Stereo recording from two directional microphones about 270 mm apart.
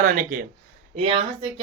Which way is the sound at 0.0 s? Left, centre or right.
Right.